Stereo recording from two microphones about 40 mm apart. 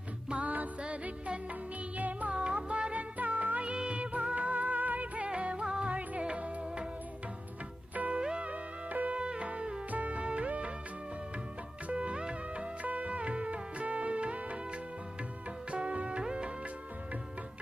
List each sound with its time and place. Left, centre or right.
0.4 s music: right
0.8 s music: right
2.3 s music: right
5.3 s music: right
5.9 s music: right
7.9 s music: right
8.2 s music: right
9.9 s music: right
11.9 s music: right
12.8 s music: right